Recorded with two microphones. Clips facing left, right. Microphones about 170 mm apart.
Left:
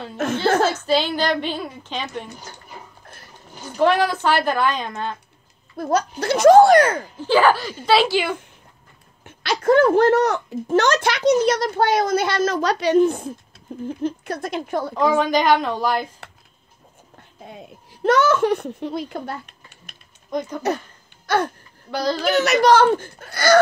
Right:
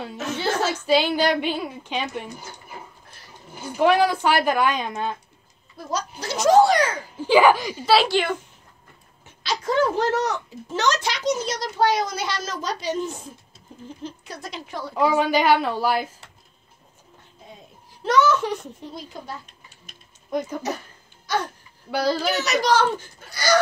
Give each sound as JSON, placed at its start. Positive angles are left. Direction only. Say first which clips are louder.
{"t": 0.8, "sound": "speech", "louder": "even", "side_deg": -10}
{"t": 3.5, "sound": "speech", "louder": "even", "side_deg": -10}
{"t": 5.8, "sound": "speech", "louder": "left 8 dB", "side_deg": 55}
{"t": 7.2, "sound": "speech", "louder": "right 1 dB", "side_deg": -10}
{"t": 9.2, "sound": "speech", "louder": "left 6 dB", "side_deg": 55}
{"t": 15.0, "sound": "speech", "louder": "left 1 dB", "side_deg": -10}
{"t": 18.0, "sound": "a child's voice", "louder": "left 3 dB", "side_deg": 55}
{"t": 20.2, "sound": "speech", "louder": "left 1 dB", "side_deg": -5}
{"t": 21.3, "sound": "speech", "louder": "left 5 dB", "side_deg": 55}